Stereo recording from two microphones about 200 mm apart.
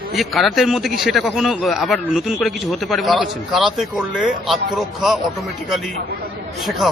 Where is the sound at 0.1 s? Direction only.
Centre (ahead or behind).